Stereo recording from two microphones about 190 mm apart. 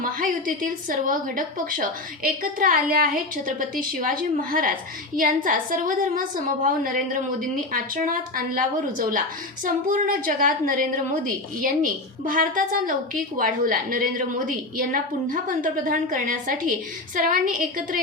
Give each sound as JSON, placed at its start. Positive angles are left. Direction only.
{"t": 0.0, "sound": "a woman's voice", "side_deg": -45}
{"t": 5.1, "sound": "a woman's voice", "side_deg": -45}